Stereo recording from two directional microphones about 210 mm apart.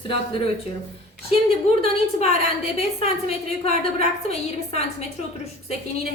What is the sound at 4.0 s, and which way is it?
Speech, 30° left (ahead or behind).